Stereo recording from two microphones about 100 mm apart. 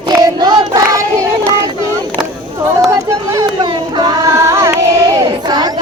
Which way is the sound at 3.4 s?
50° right (ahead or behind).